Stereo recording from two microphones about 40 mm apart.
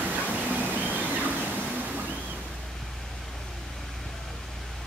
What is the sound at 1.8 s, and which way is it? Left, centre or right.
Waves, right.